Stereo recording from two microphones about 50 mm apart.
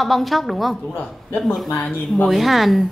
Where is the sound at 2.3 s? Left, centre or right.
Centre.